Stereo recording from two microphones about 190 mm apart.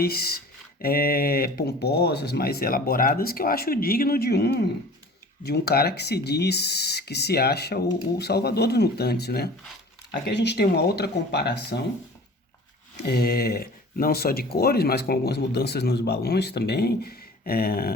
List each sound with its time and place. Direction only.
0.0 s speech: 55° left (ahead or behind)
13.0 s speech: 55° left (ahead or behind)